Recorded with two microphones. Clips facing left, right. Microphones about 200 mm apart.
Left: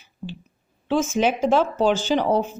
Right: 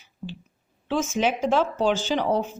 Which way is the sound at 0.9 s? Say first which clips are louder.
Left 3 dB; 45° left (ahead or behind).